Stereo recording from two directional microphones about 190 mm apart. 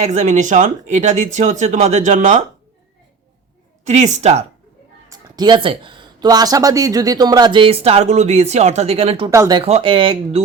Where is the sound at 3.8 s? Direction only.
40° right (ahead or behind).